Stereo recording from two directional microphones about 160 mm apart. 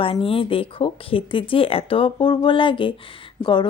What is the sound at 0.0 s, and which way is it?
A woman's voice, 35° left (ahead or behind).